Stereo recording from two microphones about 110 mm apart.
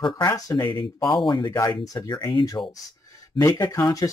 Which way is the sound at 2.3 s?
45° left (ahead or behind).